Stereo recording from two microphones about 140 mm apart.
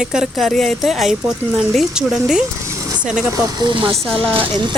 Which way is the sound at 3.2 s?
25° right (ahead or behind).